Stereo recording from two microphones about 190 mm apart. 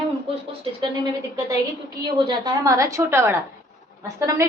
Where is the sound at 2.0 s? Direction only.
20° right (ahead or behind).